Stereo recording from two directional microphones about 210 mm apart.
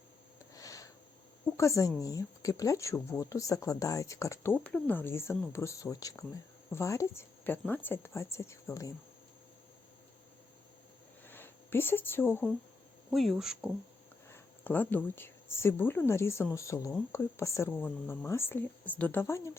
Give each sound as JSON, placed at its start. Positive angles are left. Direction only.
{"t": 0.5, "sound": "a sound", "side_deg": 15}
{"t": 1.5, "sound": "speech", "side_deg": 15}
{"t": 11.3, "sound": "speech", "side_deg": 10}
{"t": 13.1, "sound": "speech", "side_deg": 0}
{"t": 14.3, "sound": "speech", "side_deg": 10}